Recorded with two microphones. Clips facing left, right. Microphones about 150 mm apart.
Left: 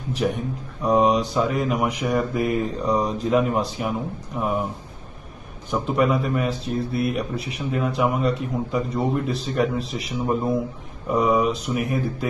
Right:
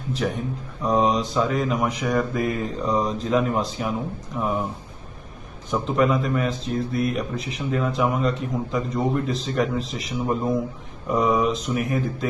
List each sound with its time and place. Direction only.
0.2 s speech: 20° left (ahead or behind)
5.7 s speech: 10° left (ahead or behind)